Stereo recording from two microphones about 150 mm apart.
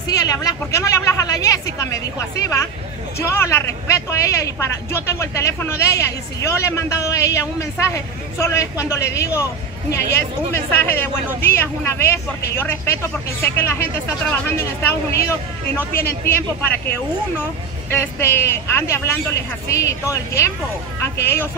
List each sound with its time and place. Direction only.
0.1 s speech: 25° left (ahead or behind)
17.9 s speech: 15° left (ahead or behind)